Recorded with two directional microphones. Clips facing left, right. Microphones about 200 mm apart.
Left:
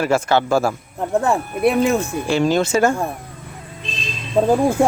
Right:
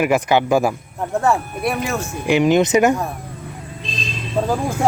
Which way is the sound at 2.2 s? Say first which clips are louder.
Right 5 dB; 15° right (ahead or behind).